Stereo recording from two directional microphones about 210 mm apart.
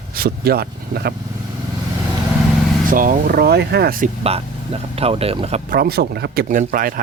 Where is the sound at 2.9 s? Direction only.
40° right (ahead or behind).